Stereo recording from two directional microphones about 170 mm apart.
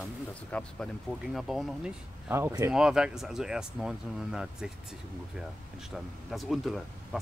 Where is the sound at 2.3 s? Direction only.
20° right (ahead or behind).